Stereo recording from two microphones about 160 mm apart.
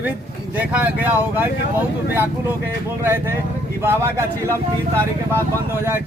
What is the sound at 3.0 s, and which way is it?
Speech, 15° right (ahead or behind).